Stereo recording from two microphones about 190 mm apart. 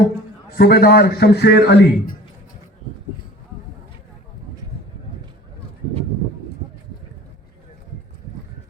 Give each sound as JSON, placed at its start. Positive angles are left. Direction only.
{"t": 0.5, "sound": "a man's voice", "side_deg": 55}